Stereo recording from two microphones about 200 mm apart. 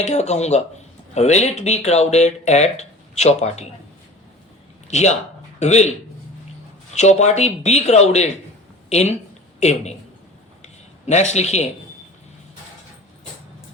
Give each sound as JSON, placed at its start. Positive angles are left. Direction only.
{"t": 0.0, "sound": "speech", "side_deg": 35}
{"t": 4.9, "sound": "speech", "side_deg": 35}
{"t": 6.9, "sound": "speech", "side_deg": 35}
{"t": 10.6, "sound": "a sound", "side_deg": 35}